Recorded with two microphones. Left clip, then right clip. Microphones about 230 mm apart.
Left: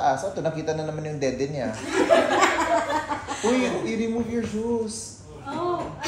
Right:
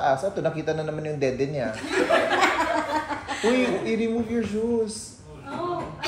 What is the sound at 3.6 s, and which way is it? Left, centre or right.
Speech, right.